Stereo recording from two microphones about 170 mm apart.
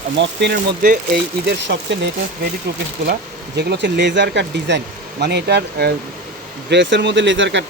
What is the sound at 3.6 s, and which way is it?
Speech, 85° right.